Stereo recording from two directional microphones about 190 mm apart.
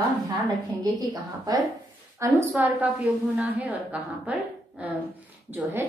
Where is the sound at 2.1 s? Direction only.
10° right (ahead or behind).